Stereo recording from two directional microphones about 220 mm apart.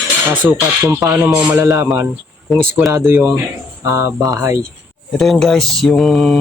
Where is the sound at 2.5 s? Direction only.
Centre (ahead or behind).